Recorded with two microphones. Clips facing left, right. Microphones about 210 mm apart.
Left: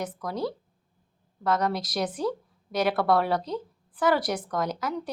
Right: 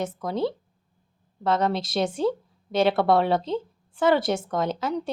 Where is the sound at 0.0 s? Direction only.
25° right (ahead or behind).